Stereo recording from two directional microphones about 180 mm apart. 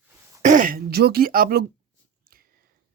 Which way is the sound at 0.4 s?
45° right (ahead or behind).